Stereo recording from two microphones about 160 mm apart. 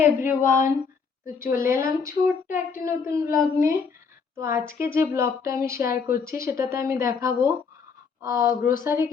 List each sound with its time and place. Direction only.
0.0 s a woman's voice: 15° right (ahead or behind)
1.6 s a woman's voice: 20° right (ahead or behind)